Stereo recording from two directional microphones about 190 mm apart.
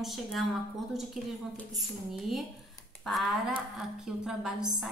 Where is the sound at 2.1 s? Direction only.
Centre (ahead or behind).